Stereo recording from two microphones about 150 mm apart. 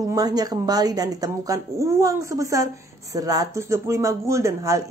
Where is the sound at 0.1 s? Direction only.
25° right (ahead or behind).